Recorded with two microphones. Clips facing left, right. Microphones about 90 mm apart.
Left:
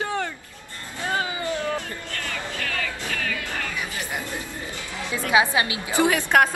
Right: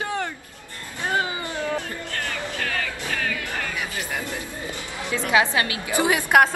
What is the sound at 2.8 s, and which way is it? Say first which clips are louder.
Music: right 1 dB; 45° right (ahead or behind).